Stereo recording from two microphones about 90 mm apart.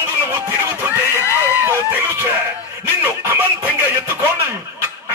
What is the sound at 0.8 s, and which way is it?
Screaming, 25° right (ahead or behind).